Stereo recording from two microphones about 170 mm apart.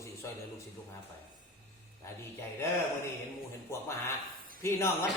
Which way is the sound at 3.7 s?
15° left (ahead or behind).